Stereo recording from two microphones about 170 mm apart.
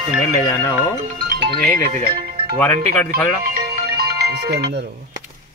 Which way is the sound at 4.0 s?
65° right (ahead or behind).